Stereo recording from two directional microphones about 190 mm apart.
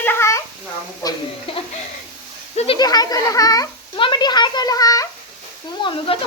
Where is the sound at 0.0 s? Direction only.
10° left (ahead or behind); by 1.6 s 30° left (ahead or behind).